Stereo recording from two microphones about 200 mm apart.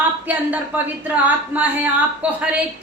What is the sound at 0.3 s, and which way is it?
A woman's voice, 10° right (ahead or behind).